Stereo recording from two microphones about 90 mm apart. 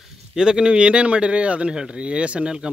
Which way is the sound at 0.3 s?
10° right (ahead or behind).